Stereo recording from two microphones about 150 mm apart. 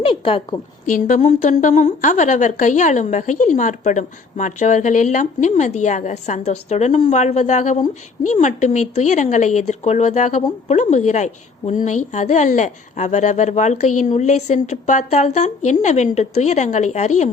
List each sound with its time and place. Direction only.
0.0 s a woman's voice: 35° left (ahead or behind)
0.9 s a woman's voice: 65° left (ahead or behind)
1.2 s a woman's voice: 50° left (ahead or behind)